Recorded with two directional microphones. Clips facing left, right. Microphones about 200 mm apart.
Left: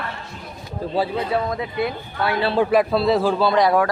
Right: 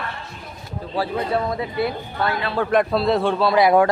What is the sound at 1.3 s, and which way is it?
A man's voice, centre (ahead or behind).